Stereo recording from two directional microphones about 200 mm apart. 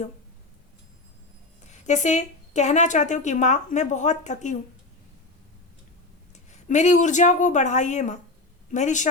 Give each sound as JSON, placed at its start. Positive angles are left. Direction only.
{"t": 1.6, "sound": "a woman's voice", "side_deg": 35}
{"t": 6.5, "sound": "a woman's voice", "side_deg": 35}